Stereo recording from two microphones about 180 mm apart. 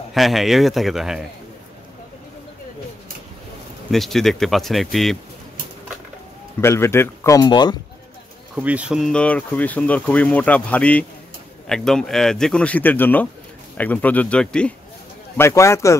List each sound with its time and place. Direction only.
0.1 s speech: centre (ahead or behind)
3.9 s speech: centre (ahead or behind)
6.6 s speech: 15° left (ahead or behind)
8.5 s speech: 5° right (ahead or behind); by 16.0 s 15° left (ahead or behind)